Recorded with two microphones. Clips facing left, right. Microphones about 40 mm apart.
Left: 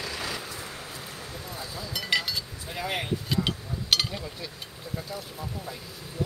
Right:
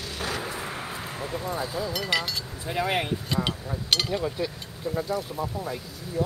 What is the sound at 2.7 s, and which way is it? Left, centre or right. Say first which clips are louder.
Speech: right 4 dB; right.